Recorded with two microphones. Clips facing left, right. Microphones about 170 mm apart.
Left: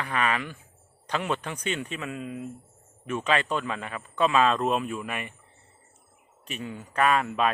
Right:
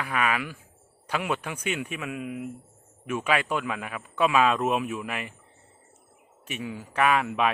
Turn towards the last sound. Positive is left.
turn(degrees=-10)  # may be behind; listen again after turning